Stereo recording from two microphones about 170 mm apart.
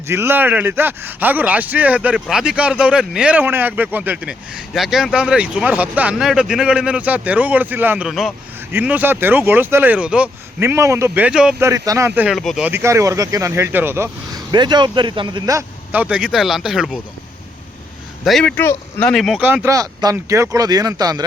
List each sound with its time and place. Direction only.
0.1 s speech: 15° right (ahead or behind)
11.7 s speech: 20° right (ahead or behind)
12.4 s speech: centre (ahead or behind)
12.6 s speech: 15° right (ahead or behind)
18.3 s speech: 5° left (ahead or behind)
19.5 s speech: 15° right (ahead or behind)